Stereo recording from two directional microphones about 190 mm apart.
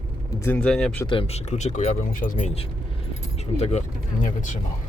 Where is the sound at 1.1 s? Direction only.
30° left (ahead or behind).